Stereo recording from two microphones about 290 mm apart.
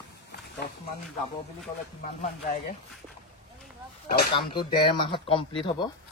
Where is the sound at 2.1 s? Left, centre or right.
Left.